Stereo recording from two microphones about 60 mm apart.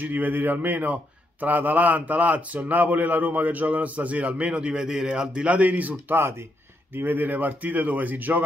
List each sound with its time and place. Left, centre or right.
0.0 s a man's voice: right
6.1 s speech: right